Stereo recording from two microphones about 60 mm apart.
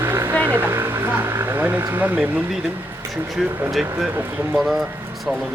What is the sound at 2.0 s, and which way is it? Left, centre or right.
Speech, right.